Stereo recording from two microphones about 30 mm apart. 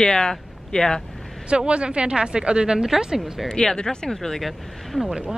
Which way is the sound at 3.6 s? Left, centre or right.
Centre.